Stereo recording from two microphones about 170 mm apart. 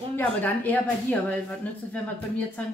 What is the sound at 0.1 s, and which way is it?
Speech, 10° left (ahead or behind).